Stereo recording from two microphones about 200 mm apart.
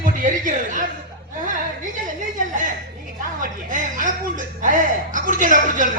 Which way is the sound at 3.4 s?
40° right (ahead or behind).